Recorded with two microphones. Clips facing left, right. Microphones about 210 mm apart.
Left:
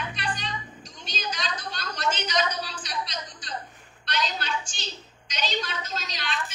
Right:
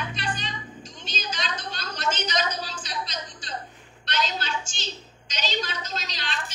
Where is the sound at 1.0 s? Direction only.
25° right (ahead or behind).